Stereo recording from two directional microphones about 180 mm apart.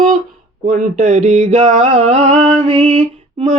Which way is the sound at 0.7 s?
45° right (ahead or behind).